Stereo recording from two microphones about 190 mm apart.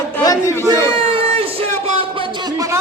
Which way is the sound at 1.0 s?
30° right (ahead or behind).